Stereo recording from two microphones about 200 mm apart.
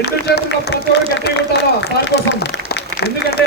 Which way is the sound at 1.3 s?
55° left (ahead or behind).